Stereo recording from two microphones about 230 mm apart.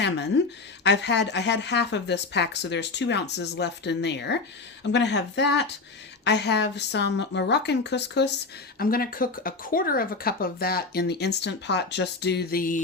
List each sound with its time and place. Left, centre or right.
0.0 s a woman's voice: left